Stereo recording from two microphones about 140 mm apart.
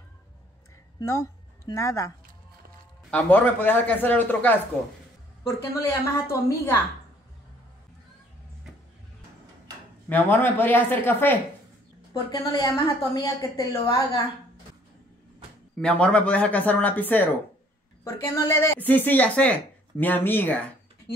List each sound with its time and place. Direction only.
1.0 s speech: 20° left (ahead or behind)
3.1 s speech: 10° left (ahead or behind)
10.0 s speech: 15° left (ahead or behind)
12.1 s a woman's voice: 30° left (ahead or behind)
15.8 s speech: 10° left (ahead or behind)